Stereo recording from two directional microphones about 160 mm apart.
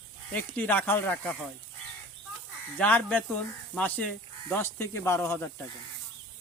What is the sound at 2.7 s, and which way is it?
Speech, 10° left (ahead or behind).